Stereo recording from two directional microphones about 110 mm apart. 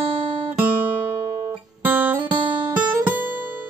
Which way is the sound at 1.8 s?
15° right (ahead or behind).